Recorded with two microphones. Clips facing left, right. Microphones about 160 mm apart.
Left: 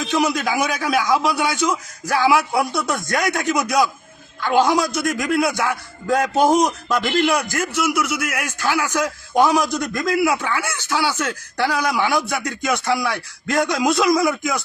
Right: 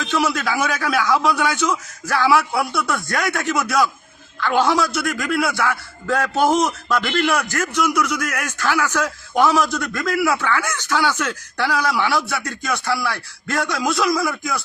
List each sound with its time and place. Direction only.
0.0 s a man's voice: 20° left (ahead or behind)